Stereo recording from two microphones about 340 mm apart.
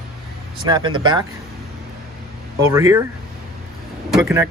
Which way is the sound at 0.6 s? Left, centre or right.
Centre.